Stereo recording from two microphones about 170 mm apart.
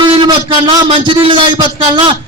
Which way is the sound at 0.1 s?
30° right (ahead or behind).